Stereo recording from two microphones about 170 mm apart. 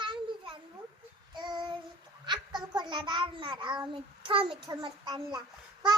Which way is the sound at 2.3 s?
25° right (ahead or behind).